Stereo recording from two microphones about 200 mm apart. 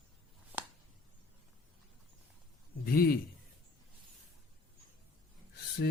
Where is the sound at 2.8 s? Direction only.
50° left (ahead or behind).